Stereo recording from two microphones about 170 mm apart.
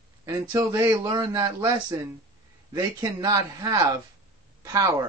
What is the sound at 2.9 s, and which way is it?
Speech, 20° right (ahead or behind).